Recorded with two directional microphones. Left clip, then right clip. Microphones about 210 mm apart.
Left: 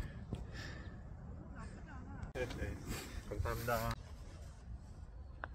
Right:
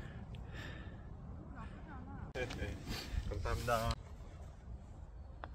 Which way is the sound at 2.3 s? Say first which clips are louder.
Even; 40° left (ahead or behind).